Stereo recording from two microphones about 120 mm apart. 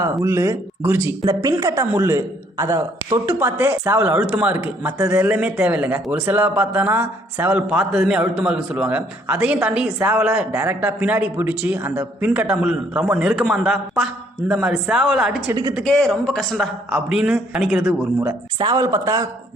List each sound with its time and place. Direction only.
0.0 s speech: 25° right (ahead or behind)
1.2 s a man's voice: 35° right (ahead or behind); by 15.4 s 5° right (ahead or behind)
15.8 s speech: 5° left (ahead or behind)
16.9 s a man's voice: 5° right (ahead or behind)
18.6 s speech: 30° right (ahead or behind)